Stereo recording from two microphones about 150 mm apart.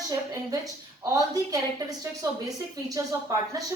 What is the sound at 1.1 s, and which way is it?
Speech, 25° right (ahead or behind).